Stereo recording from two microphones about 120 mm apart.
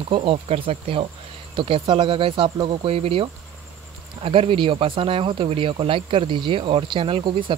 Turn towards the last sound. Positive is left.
turn(degrees=-45)  # may be behind; listen again after turning